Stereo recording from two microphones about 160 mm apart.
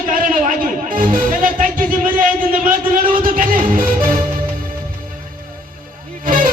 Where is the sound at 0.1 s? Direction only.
55° right (ahead or behind).